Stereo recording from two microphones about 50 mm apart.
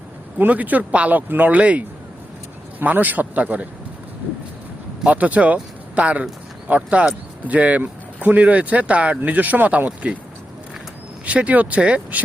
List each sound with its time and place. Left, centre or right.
0.3 s a man's voice: right
5.0 s speech: right
11.3 s speech: right